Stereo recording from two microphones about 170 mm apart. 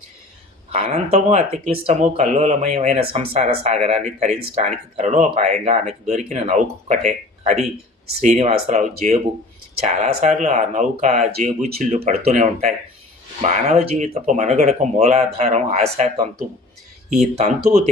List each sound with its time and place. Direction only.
0.7 s speech: 35° right (ahead or behind)